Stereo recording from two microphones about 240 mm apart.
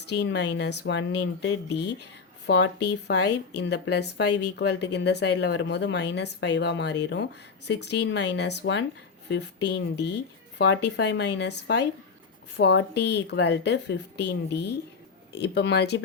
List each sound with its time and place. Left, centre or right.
0.0 s speech: left